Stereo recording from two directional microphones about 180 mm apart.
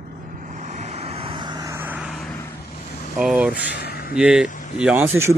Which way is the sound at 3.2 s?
5° right (ahead or behind).